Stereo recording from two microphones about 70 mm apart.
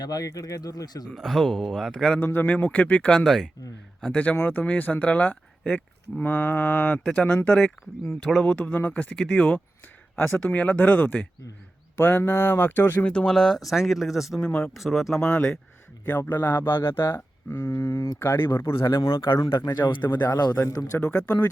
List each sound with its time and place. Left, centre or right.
0.0 s speech: left
1.0 s speech: centre
2.1 s speech: left
3.2 s speech: centre
4.1 s speech: left
10.2 s speech: left
13.1 s speech: centre
14.3 s speech: centre
14.8 s speech: centre
15.2 s speech: centre
16.0 s speech: left
18.2 s speech: left
19.3 s speech: left
20.5 s speech: left